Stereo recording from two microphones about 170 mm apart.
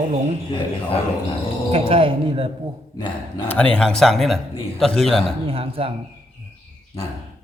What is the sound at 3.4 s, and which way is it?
A man's voice, 10° left (ahead or behind).